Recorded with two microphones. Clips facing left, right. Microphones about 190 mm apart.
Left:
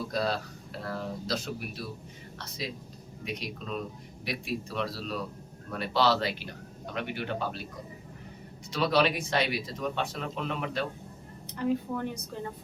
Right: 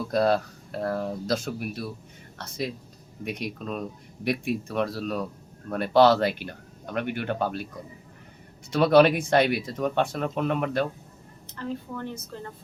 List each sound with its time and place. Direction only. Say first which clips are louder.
0.1 s speech: right 11 dB; 55° right (ahead or behind)
3.2 s speech: right 5 dB; 55° right (ahead or behind)
8.7 s speech: right 8 dB; 55° right (ahead or behind)
11.5 s speech: left 4 dB; 15° left (ahead or behind)